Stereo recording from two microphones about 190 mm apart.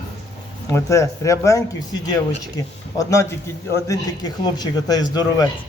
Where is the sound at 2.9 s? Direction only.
15° left (ahead or behind).